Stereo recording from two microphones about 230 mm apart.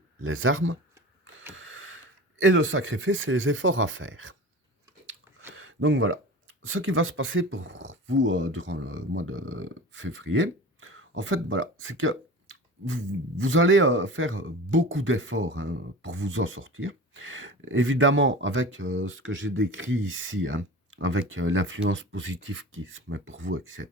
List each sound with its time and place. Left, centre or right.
0.3 s speech: right
1.5 s a sound: right
2.4 s speech: right
5.5 s speech: right